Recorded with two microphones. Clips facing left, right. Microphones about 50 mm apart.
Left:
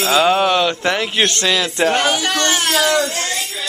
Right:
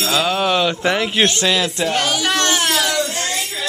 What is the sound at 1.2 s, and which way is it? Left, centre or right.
Speech, centre.